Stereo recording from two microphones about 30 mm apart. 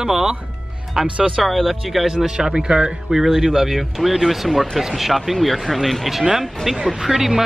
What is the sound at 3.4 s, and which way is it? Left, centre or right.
A man's voice, centre.